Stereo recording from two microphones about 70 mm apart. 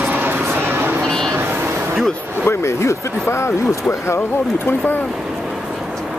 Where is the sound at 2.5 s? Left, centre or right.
Left.